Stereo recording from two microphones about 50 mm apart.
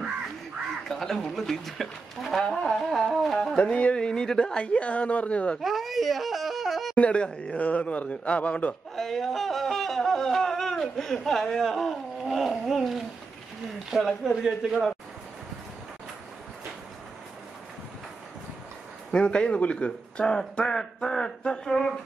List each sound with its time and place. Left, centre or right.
0.8 s speech: centre
3.5 s a man's voice: left
4.7 s speech: left
5.6 s yodeling: centre
7.0 s speech: left
8.9 s yodeling: centre
13.8 s speech: centre
19.1 s speech: left